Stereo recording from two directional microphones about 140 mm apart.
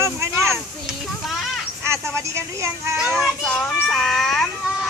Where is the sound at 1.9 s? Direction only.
20° right (ahead or behind).